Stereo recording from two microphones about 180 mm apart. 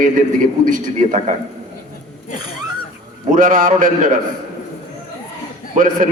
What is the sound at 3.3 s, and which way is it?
Speech, 45° right (ahead or behind).